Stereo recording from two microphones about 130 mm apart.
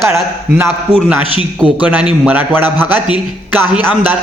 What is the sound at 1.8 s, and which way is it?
Speech, 10° right (ahead or behind).